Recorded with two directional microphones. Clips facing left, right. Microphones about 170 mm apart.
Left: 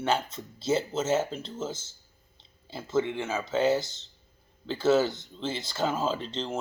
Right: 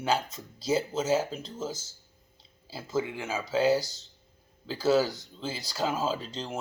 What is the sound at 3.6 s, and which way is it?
Speech, 25° left (ahead or behind).